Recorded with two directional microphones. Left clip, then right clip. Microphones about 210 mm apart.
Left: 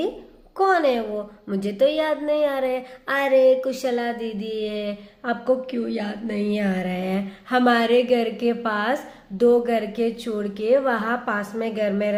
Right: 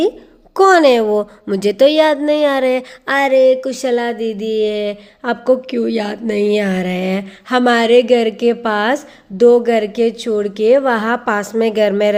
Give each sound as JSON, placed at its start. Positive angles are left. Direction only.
{"t": 0.5, "sound": "a woman's voice", "side_deg": -50}